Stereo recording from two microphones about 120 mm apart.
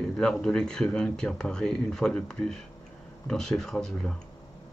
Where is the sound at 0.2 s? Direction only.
5° left (ahead or behind).